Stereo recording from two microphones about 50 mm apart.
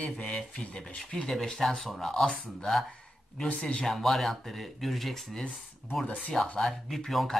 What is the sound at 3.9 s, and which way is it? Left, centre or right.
Speech, centre.